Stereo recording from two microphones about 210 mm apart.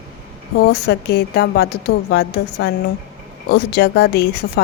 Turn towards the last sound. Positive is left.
turn(degrees=50)  # may be behind; listen again after turning